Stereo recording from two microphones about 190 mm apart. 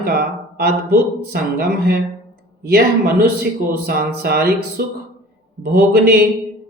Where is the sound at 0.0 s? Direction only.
55° right (ahead or behind).